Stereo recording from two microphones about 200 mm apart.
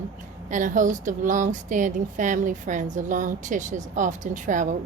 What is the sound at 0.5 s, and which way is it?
Speech, 40° right (ahead or behind).